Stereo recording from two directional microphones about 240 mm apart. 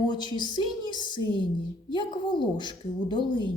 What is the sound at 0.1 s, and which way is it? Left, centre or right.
A woman's voice, centre.